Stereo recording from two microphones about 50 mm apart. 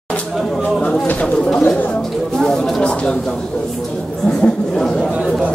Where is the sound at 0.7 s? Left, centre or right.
Left.